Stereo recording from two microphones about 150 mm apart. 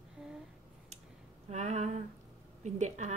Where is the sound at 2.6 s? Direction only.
50° right (ahead or behind).